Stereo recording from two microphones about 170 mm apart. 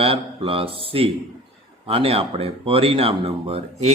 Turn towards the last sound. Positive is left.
turn(degrees=-35)  # may be behind; listen again after turning